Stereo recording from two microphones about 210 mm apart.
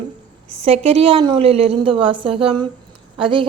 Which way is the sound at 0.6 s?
30° right (ahead or behind).